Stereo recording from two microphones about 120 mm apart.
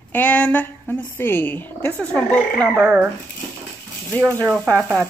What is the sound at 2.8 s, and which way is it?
Speech, 20° right (ahead or behind).